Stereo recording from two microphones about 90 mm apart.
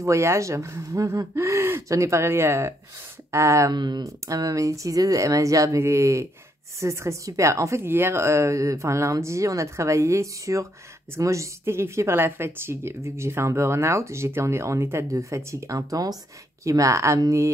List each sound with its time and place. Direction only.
0.0 s speech: 35° right (ahead or behind)
3.7 s speech: 50° right (ahead or behind); by 17.5 s 35° right (ahead or behind)